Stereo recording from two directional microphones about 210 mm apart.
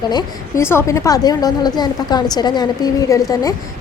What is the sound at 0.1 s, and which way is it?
A woman's voice, 15° left (ahead or behind).